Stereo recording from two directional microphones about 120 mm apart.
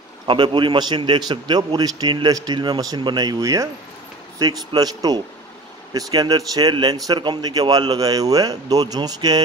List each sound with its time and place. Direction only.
0.3 s speech: 40° right (ahead or behind)